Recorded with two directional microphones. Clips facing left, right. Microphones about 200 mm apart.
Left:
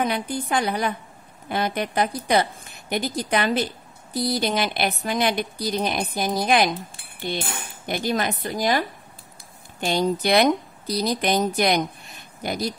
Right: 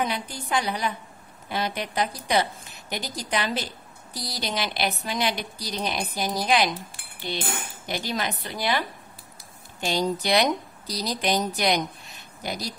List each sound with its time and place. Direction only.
0.0 s a woman's voice: 50° left (ahead or behind)
7.8 s a woman's voice: 50° left (ahead or behind)
9.8 s a woman's voice: 55° left (ahead or behind)